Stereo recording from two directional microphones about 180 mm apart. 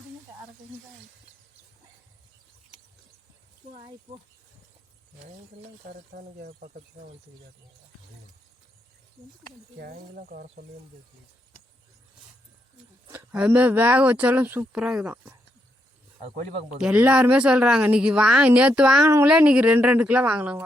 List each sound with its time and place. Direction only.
5.9 s speech: 55° right (ahead or behind)
9.7 s speech: 55° right (ahead or behind)
13.1 s speech: 10° right (ahead or behind)
16.8 s speech: 10° right (ahead or behind)